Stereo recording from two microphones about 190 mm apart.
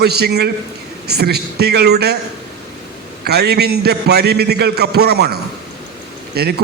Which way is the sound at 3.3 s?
60° right (ahead or behind).